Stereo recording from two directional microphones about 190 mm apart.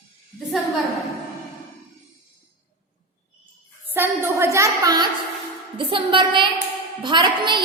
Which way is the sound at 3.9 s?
10° right (ahead or behind).